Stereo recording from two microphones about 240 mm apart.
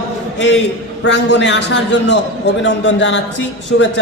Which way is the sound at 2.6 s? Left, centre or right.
Left.